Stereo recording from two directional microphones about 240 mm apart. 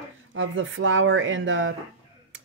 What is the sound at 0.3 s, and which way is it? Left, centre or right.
Speech, right.